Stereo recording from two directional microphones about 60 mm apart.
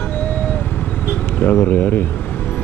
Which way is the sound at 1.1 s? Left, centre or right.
Left.